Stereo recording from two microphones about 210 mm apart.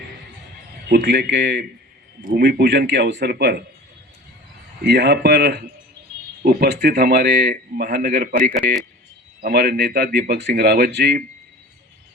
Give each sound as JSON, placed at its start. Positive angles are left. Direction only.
{"t": 0.9, "sound": "a man's voice", "side_deg": -50}
{"t": 2.2, "sound": "a man's voice", "side_deg": -45}
{"t": 4.8, "sound": "a man's voice", "side_deg": -50}